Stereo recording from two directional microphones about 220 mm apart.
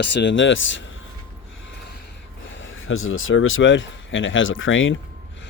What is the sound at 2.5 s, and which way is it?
Speech, 60° left (ahead or behind).